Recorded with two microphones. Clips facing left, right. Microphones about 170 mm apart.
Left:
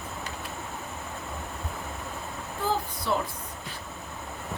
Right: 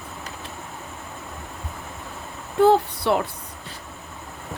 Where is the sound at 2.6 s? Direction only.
70° right (ahead or behind).